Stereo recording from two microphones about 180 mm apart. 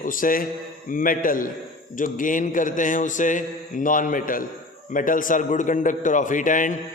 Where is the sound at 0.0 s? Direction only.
50° left (ahead or behind).